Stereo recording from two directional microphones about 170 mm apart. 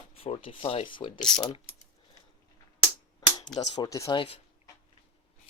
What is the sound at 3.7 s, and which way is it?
Speech, 20° left (ahead or behind).